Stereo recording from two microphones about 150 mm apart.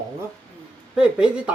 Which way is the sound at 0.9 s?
5° right (ahead or behind).